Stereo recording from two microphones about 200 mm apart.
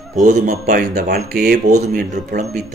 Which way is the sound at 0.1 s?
35° right (ahead or behind).